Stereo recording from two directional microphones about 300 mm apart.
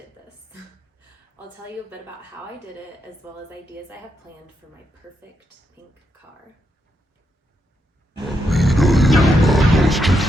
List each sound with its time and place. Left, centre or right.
3.8 s a woman's voice: centre
8.2 s music: centre